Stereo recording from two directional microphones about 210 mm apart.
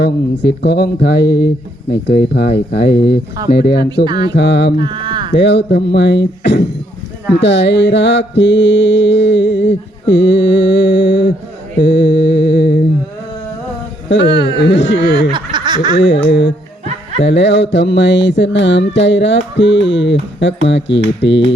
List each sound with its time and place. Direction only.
0.0 s mantra: 50° left (ahead or behind)
4.0 s speech: 20° right (ahead or behind)
4.4 s mantra: 55° left (ahead or behind)
4.8 s speech: 20° right (ahead or behind)
5.4 s mantra: 55° left (ahead or behind)
14.3 s a sound: 20° right (ahead or behind)
14.6 s mantra: 55° left (ahead or behind)
15.3 s snicker: 20° right (ahead or behind)
16.0 s mantra: 55° left (ahead or behind)
17.2 s mantra: 55° left (ahead or behind)